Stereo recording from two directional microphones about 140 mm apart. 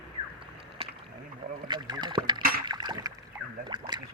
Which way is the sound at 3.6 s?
30° right (ahead or behind).